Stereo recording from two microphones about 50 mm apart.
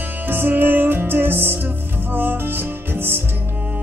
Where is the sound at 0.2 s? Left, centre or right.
Right.